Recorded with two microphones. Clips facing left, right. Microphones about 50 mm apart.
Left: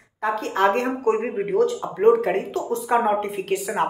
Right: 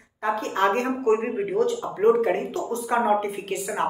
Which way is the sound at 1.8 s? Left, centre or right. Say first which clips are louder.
Left 1 dB; centre.